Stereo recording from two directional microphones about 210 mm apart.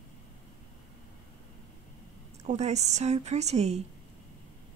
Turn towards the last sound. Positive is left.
turn(degrees=-30)  # may be behind; listen again after turning